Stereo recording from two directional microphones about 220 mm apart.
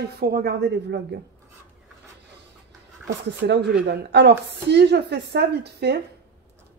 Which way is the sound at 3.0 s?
50° right (ahead or behind).